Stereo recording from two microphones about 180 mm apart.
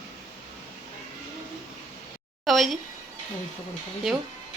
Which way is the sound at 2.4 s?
Centre (ahead or behind).